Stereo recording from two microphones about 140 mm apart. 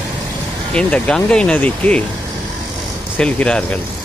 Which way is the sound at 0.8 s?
10° left (ahead or behind).